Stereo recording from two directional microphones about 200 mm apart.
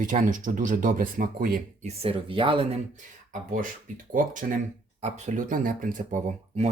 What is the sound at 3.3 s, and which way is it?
Speech, 40° right (ahead or behind).